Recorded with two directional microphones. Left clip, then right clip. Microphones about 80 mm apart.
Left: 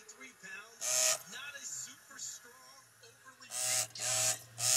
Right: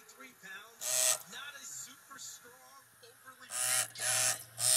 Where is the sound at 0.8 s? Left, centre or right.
Centre.